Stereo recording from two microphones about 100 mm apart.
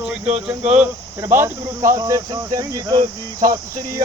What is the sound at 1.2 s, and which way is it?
Speech, 25° right (ahead or behind).